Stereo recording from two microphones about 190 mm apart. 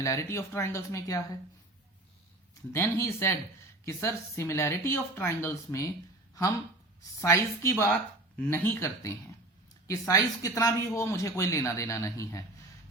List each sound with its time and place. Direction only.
0.0 s speech: 15° left (ahead or behind)
2.7 s speech: 15° left (ahead or behind)
7.2 s speech: 15° left (ahead or behind)